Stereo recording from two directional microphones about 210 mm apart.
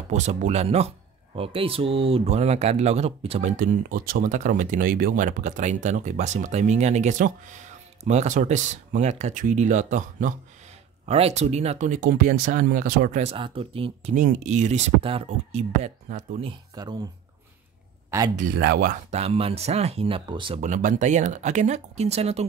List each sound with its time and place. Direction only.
0.1 s speech: 35° right (ahead or behind)
13.2 s speech: 30° right (ahead or behind)
16.4 s speech: 20° right (ahead or behind)
18.3 s speech: 45° right (ahead or behind); by 20.6 s 25° right (ahead or behind)
20.6 s speech: 35° right (ahead or behind)